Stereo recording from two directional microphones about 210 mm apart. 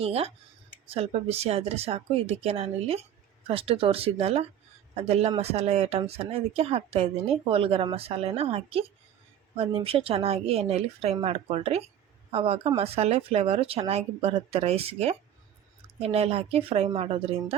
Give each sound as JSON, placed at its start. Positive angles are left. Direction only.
{"t": 0.0, "sound": "speech", "side_deg": -30}